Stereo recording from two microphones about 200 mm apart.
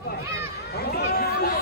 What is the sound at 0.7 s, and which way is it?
Speech, 50° left (ahead or behind).